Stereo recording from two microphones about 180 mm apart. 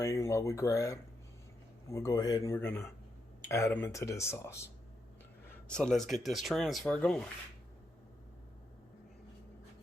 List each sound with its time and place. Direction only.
0.0 s speech: 15° left (ahead or behind)
5.6 s speech: 5° left (ahead or behind)